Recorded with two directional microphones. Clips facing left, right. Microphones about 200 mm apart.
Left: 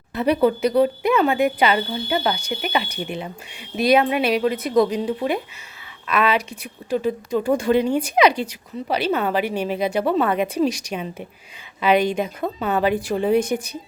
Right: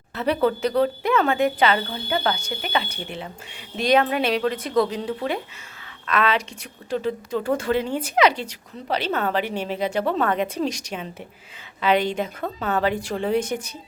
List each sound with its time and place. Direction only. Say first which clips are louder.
0.1 s speech: left 3 dB; 15° left (ahead or behind)